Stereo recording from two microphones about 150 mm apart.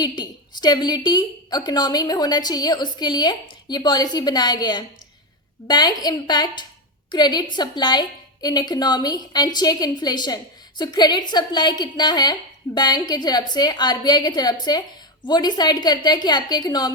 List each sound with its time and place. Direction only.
0.0 s a woman's voice: 30° left (ahead or behind)